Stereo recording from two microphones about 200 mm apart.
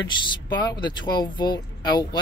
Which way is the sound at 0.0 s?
20° left (ahead or behind).